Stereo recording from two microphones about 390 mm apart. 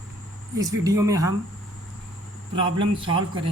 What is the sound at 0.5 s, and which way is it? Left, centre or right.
Speech, centre.